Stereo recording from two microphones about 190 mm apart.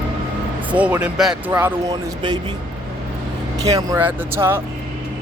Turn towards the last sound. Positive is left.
turn(degrees=-15)  # may be behind; listen again after turning